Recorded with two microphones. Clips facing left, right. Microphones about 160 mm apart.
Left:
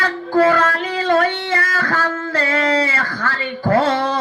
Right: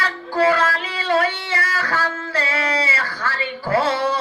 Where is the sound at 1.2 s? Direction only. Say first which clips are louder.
Left 4 dB; 50° left (ahead or behind).